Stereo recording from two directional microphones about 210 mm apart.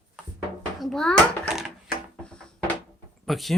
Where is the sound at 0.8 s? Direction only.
Centre (ahead or behind).